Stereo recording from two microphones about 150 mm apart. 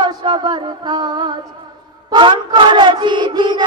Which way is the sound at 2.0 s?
30° right (ahead or behind).